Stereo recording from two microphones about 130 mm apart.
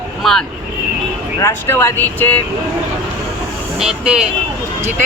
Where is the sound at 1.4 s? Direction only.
20° left (ahead or behind).